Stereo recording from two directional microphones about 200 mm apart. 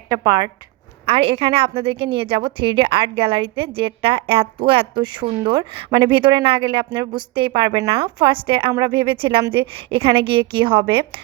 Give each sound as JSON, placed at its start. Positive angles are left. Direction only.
{"t": 0.3, "sound": "speech", "side_deg": -20}
{"t": 1.0, "sound": "a woman's voice", "side_deg": -30}